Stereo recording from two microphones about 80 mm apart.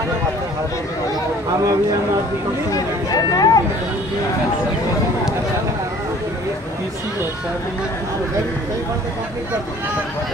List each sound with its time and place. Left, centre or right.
3.1 s speech: left